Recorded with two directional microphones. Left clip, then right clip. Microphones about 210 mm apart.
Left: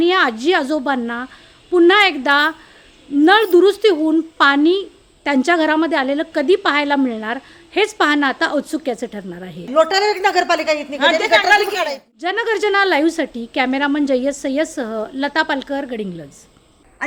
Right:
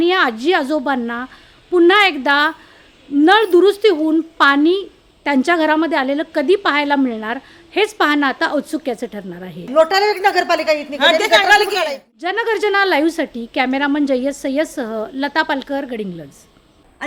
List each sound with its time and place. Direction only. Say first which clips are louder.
0.0 s a woman's voice: even; centre (ahead or behind)
11.3 s a woman's voice: right 1 dB; 50° right (ahead or behind)
11.7 s a woman's voice: right 2 dB; centre (ahead or behind)